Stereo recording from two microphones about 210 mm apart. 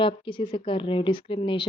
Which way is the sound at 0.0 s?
25° left (ahead or behind).